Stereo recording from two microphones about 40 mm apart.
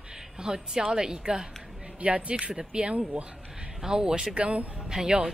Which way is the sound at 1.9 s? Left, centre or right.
Right.